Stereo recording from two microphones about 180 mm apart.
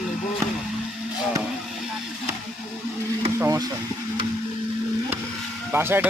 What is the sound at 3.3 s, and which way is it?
Speech, 15° right (ahead or behind).